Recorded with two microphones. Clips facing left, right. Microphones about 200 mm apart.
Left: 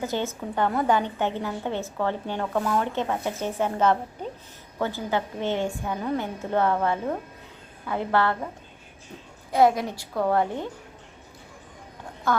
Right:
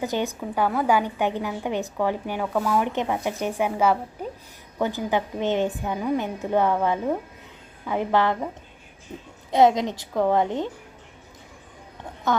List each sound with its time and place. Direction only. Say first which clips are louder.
0.0 s a woman's voice: right 2 dB; 15° right (ahead or behind)
9.5 s a woman's voice: right 2 dB; 20° right (ahead or behind)